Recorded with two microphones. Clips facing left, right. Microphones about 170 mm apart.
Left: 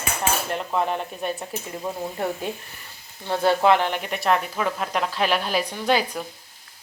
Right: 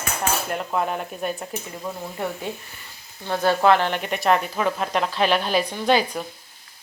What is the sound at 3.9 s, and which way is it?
Speech, centre (ahead or behind).